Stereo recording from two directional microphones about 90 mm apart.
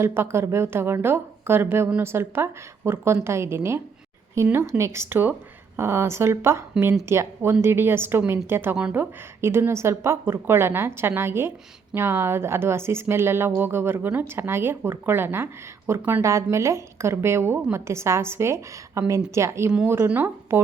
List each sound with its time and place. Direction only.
0.0 s a woman's voice: 30° right (ahead or behind)